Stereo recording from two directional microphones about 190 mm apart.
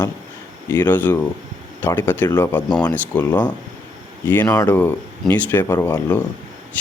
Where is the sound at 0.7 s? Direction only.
10° left (ahead or behind).